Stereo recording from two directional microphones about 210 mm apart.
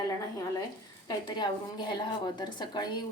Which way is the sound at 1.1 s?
20° left (ahead or behind).